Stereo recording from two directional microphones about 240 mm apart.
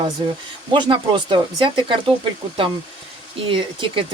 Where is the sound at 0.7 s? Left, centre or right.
Centre.